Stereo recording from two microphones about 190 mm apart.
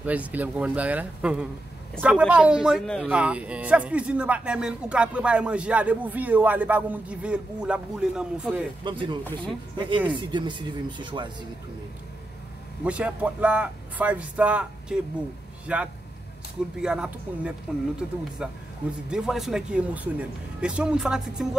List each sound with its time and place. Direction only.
0.0 s speech: 10° right (ahead or behind)
8.8 s speech: 25° right (ahead or behind)
9.2 s speech: 10° left (ahead or behind)
9.8 s speech: 25° right (ahead or behind)
12.8 s a man's voice: 5° right (ahead or behind)